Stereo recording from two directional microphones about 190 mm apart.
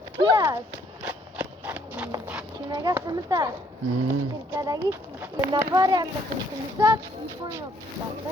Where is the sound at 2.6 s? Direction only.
20° right (ahead or behind).